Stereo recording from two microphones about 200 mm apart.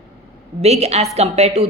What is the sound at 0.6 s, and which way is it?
Speech, 30° right (ahead or behind).